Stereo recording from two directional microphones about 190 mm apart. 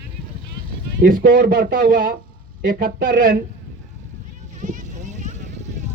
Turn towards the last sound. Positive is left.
turn(degrees=-40)  # may be behind; listen again after turning